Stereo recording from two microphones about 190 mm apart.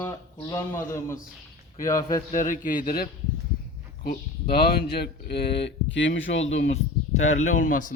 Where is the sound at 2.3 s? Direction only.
45° left (ahead or behind); by 6.7 s 85° left.